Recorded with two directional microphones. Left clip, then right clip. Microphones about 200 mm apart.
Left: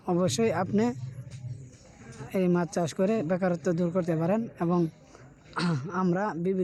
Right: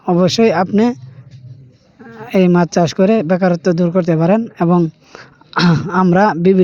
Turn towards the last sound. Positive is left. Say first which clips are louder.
# right 17 dB
turn(degrees=-40)  # may be behind; listen again after turning